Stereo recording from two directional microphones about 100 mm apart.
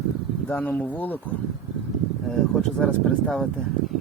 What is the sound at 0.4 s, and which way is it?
Speech, 20° left (ahead or behind).